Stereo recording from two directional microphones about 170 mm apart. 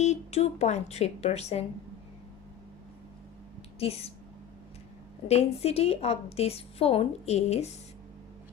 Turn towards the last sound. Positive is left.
turn(degrees=40)  # may be behind; listen again after turning